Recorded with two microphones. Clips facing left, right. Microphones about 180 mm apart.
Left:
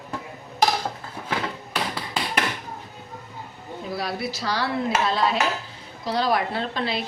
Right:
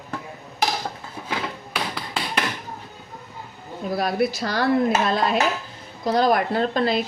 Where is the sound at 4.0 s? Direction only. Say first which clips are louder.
Right 8 dB; 50° right (ahead or behind).